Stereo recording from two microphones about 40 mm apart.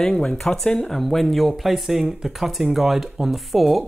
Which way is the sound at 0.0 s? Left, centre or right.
Centre.